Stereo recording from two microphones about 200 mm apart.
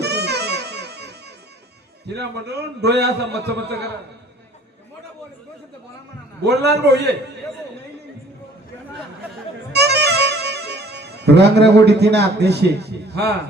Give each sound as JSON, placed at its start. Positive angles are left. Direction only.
{"t": 0.0, "sound": "music", "side_deg": -55}
{"t": 2.0, "sound": "a man's voice", "side_deg": -55}
{"t": 6.4, "sound": "a man's voice", "side_deg": -55}
{"t": 9.7, "sound": "music", "side_deg": -55}
{"t": 11.9, "sound": "a man's voice", "side_deg": -55}